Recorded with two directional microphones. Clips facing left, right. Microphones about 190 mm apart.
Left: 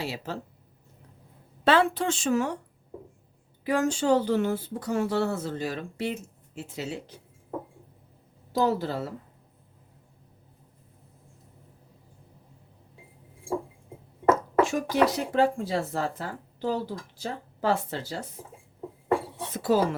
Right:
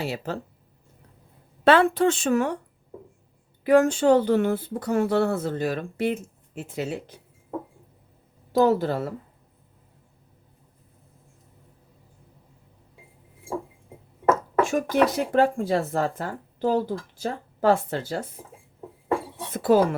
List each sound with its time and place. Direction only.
0.0 s speech: 50° right (ahead or behind)
1.6 s speech: 55° right (ahead or behind)
3.6 s speech: 60° right (ahead or behind)
8.5 s speech: 55° right (ahead or behind)
14.6 s speech: 50° right (ahead or behind)
19.5 s speech: 55° right (ahead or behind)